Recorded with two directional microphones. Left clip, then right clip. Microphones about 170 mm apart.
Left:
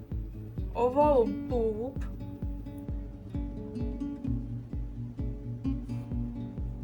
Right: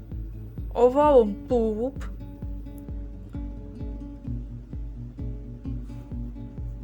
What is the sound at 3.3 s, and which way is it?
Music, centre (ahead or behind).